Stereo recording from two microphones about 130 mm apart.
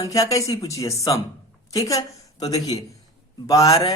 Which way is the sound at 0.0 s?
25° left (ahead or behind).